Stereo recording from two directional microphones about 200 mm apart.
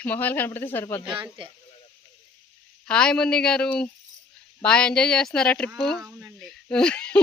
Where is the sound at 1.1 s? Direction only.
25° right (ahead or behind).